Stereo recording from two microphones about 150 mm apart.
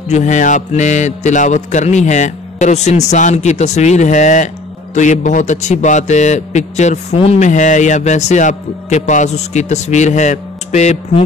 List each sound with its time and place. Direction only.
0.1 s a man's voice: 55° left (ahead or behind)